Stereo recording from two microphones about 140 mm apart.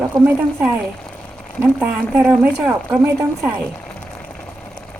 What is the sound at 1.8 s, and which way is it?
A woman's voice, 15° right (ahead or behind).